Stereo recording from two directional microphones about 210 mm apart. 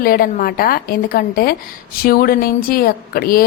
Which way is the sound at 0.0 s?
45° left (ahead or behind).